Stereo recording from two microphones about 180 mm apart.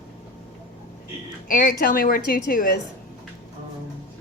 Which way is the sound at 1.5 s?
50° left (ahead or behind).